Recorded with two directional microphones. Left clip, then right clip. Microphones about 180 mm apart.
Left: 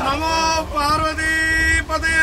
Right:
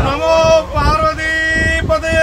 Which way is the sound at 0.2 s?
50° right (ahead or behind).